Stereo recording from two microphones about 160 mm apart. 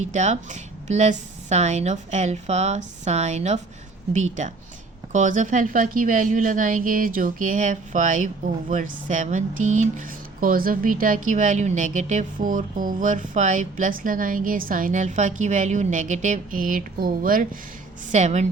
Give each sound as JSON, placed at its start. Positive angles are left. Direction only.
{"t": 0.1, "sound": "a woman's voice", "side_deg": -50}
{"t": 18.1, "sound": "speech", "side_deg": -45}